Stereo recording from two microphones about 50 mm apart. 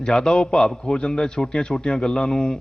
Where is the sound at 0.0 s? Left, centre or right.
Centre.